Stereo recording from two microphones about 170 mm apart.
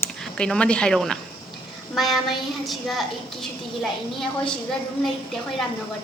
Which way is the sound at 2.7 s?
Centre (ahead or behind).